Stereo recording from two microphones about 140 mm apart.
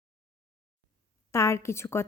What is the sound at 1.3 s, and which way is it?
Speech, 20° left (ahead or behind).